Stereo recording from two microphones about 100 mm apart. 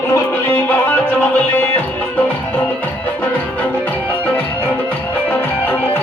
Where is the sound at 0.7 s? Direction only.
15° left (ahead or behind).